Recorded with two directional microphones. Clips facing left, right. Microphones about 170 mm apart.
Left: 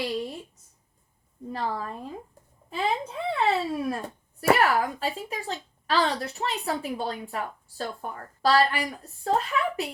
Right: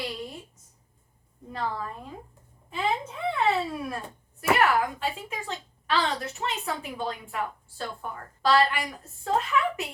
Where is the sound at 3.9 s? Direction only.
40° left (ahead or behind).